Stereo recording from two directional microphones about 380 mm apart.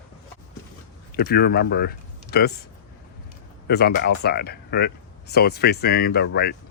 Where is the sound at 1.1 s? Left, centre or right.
Left.